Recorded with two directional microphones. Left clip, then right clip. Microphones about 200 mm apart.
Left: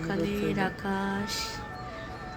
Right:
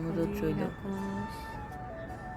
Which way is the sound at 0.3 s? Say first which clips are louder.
Left 4 dB; centre (ahead or behind).